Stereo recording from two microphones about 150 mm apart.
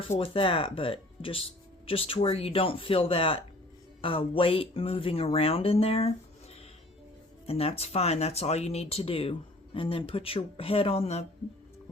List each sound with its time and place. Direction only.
0.2 s speech: 35° left (ahead or behind)
7.4 s speech: 40° left (ahead or behind)